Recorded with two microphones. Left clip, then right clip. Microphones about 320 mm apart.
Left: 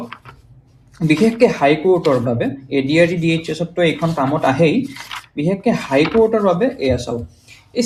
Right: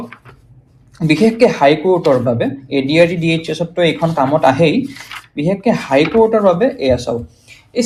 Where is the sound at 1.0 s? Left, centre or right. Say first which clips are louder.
Right 2 dB; right.